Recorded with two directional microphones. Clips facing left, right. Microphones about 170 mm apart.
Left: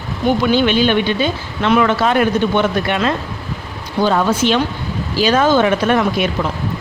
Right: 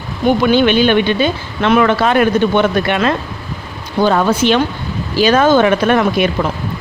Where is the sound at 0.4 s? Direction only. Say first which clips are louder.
Right 3 dB; 60° right (ahead or behind).